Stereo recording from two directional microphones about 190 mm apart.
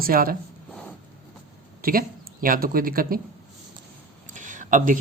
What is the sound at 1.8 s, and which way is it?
Speech, 50° right (ahead or behind).